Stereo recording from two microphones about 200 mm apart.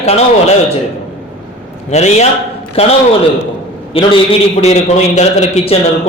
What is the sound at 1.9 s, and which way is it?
A man's voice, 35° left (ahead or behind).